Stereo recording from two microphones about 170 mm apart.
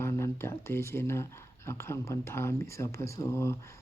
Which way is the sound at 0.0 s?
15° left (ahead or behind).